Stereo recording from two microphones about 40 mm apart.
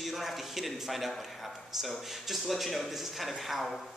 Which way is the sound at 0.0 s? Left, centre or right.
Centre.